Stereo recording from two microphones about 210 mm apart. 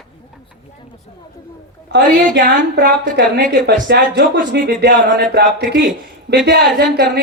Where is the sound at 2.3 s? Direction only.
55° right (ahead or behind).